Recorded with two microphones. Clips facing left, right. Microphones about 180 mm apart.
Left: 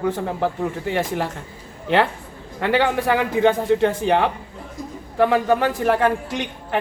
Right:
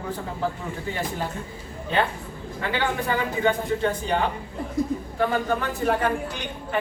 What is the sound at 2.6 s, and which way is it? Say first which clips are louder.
A woman's voice: left 7 dB; 75° left (ahead or behind).